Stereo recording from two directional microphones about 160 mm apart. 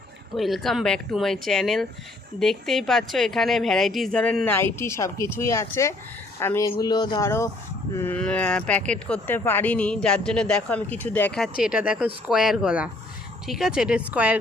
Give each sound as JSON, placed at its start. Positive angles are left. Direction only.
{"t": 0.3, "sound": "a woman's voice", "side_deg": 0}